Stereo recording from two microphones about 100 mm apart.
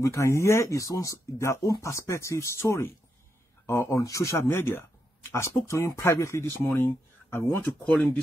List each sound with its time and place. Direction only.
0.0 s speech: 30° left (ahead or behind)